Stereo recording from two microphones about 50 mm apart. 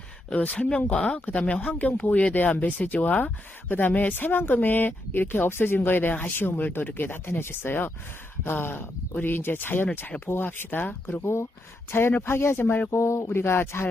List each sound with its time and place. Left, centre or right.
0.3 s speech: left
11.2 s speech: left
11.9 s speech: left
12.9 s speech: left
13.4 s speech: left